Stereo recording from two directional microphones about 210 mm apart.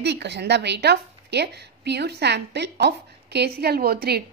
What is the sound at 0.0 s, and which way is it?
A woman's voice, 55° right (ahead or behind).